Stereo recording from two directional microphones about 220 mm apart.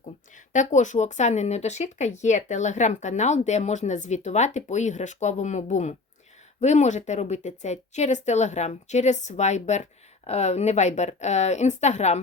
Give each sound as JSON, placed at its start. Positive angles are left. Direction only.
{"t": 0.5, "sound": "a woman's voice", "side_deg": 35}